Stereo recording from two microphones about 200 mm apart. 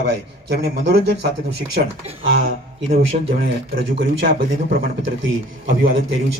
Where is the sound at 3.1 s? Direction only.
45° right (ahead or behind).